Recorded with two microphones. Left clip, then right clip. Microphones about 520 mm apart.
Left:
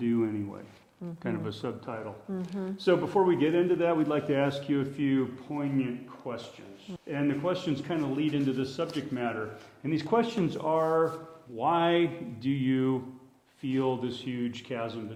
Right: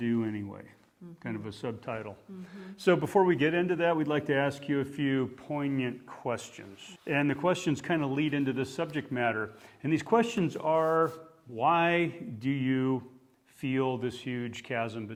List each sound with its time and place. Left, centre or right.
0.0 s a sound: right
1.9 s a man's voice: right
2.8 s a man's voice: right
6.3 s speech: right
7.1 s a man's voice: right
7.9 s a man's voice: right
9.8 s a man's voice: right